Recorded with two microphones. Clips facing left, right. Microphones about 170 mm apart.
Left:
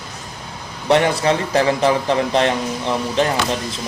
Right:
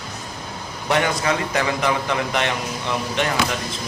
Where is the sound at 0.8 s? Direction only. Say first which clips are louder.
Left 5 dB; 30° left (ahead or behind).